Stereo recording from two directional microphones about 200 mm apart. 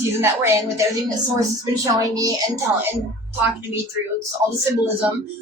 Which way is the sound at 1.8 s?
15° right (ahead or behind).